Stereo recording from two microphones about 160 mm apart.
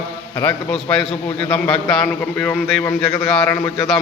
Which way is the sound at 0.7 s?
5° left (ahead or behind).